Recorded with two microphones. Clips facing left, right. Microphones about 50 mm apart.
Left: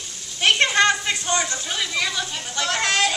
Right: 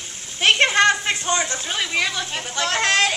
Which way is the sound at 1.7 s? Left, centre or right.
Right.